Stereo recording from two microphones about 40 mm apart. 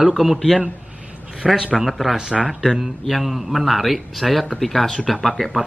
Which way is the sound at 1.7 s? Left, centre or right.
Centre.